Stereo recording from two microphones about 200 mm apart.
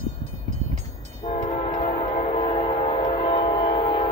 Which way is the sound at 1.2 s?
40° left (ahead or behind).